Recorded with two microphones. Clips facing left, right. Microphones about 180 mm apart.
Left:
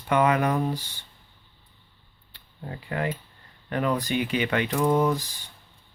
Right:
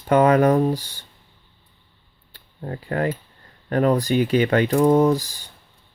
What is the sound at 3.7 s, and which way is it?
Speech, 40° right (ahead or behind).